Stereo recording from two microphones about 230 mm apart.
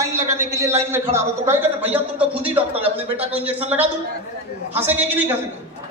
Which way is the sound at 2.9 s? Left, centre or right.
Right.